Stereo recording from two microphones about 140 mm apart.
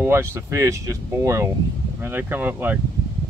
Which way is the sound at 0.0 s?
15° right (ahead or behind).